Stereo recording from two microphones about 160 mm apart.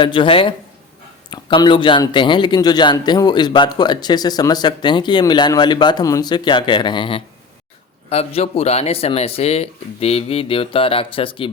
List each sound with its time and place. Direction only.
0.0 s a man's voice: 30° left (ahead or behind)